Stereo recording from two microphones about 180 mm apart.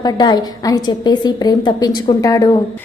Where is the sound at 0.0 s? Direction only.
20° left (ahead or behind).